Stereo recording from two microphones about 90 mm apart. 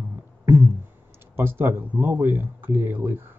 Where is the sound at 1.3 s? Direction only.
25° right (ahead or behind).